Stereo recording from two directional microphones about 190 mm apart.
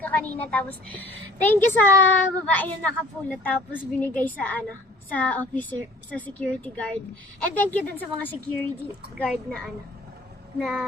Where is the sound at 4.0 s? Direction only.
10° left (ahead or behind).